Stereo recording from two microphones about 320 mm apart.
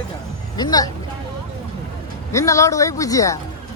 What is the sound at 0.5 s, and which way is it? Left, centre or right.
Speech, centre.